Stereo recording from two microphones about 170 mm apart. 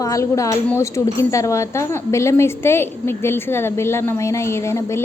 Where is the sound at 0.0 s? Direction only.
20° left (ahead or behind).